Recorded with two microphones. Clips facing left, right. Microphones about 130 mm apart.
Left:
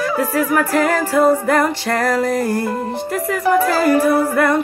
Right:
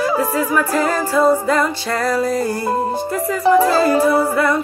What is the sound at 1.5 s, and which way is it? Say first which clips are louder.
Music: left 1 dB; 55° left (ahead or behind).